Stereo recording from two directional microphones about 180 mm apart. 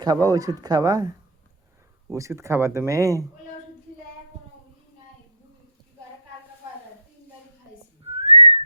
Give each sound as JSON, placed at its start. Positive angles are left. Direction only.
{"t": 0.0, "sound": "speech", "side_deg": -20}
{"t": 8.0, "sound": "whistling", "side_deg": -35}